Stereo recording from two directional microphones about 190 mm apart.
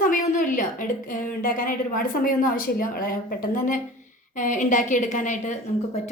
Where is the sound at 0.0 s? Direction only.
45° left (ahead or behind).